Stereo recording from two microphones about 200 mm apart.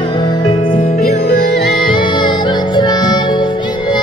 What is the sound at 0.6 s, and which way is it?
Music, 40° left (ahead or behind).